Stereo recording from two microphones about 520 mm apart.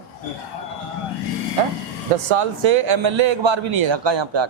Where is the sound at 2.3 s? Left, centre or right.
Right.